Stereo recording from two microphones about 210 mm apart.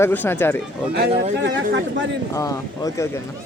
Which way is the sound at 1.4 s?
55° right (ahead or behind).